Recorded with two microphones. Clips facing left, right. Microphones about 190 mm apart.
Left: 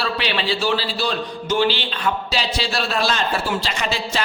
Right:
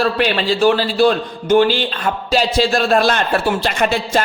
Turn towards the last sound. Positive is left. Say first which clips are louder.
# right 7 dB
turn(degrees=-55)  # may be behind; listen again after turning